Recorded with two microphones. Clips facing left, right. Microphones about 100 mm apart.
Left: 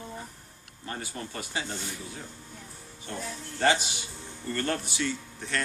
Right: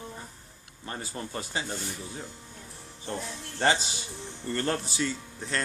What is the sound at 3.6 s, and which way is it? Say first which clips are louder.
A woman's voice: left 1 dB; 30° right (ahead or behind).